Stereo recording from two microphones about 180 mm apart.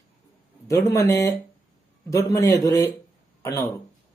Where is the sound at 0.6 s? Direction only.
15° left (ahead or behind).